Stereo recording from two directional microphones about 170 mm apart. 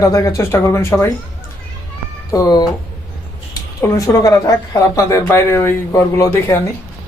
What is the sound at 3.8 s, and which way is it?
Speech, 20° left (ahead or behind).